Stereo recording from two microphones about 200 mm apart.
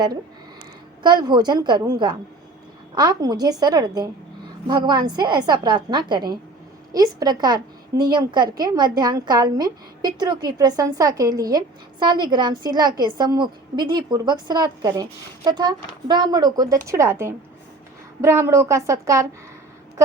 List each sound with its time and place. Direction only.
1.0 s a woman's voice: 20° right (ahead or behind)